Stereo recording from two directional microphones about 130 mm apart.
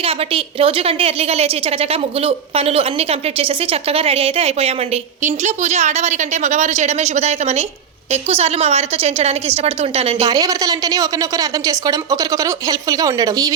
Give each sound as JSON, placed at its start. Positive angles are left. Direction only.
{"t": 0.0, "sound": "a woman's voice", "side_deg": -45}
{"t": 5.2, "sound": "a woman's voice", "side_deg": -65}
{"t": 10.2, "sound": "a woman's voice", "side_deg": -30}